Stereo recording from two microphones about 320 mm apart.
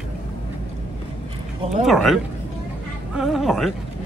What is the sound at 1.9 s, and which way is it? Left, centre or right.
Speech, centre.